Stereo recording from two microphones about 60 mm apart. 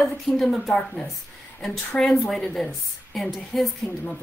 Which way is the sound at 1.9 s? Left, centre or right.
Centre.